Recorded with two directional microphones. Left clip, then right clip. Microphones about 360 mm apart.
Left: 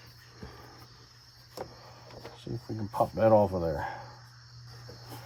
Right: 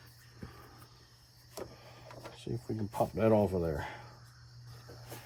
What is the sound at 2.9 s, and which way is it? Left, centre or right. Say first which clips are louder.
Speech: left 6 dB; centre.